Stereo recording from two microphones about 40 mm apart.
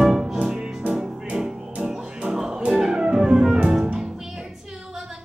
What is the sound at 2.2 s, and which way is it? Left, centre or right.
Music, centre.